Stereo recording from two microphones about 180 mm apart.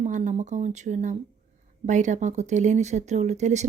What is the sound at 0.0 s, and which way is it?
A woman's voice, 40° right (ahead or behind).